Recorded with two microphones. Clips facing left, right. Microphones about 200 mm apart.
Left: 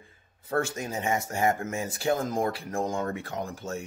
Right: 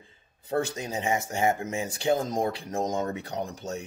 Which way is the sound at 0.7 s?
20° right (ahead or behind).